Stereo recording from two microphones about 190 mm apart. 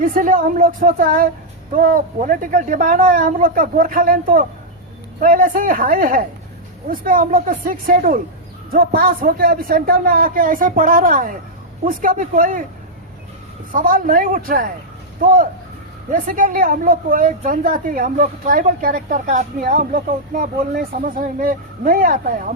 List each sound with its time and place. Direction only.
0.0 s a woman's voice: 45° right (ahead or behind)
13.7 s a woman's voice: 45° right (ahead or behind)